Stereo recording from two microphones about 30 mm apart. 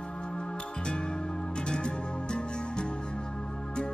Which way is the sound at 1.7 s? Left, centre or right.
Left.